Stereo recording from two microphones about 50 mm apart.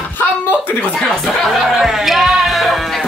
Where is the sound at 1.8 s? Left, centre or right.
Centre.